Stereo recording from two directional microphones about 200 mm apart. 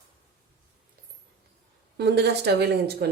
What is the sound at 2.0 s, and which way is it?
A woman's voice, 55° right (ahead or behind).